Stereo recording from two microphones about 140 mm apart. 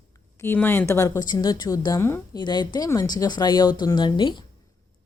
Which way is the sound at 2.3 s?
30° left (ahead or behind).